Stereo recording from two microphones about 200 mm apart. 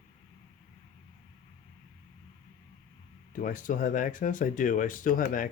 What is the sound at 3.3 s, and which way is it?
Speech, 40° left (ahead or behind).